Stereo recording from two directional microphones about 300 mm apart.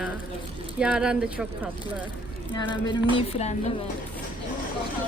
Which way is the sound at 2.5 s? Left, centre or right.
Centre.